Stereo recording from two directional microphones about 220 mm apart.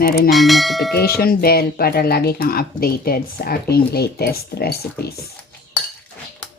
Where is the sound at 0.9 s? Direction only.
45° left (ahead or behind).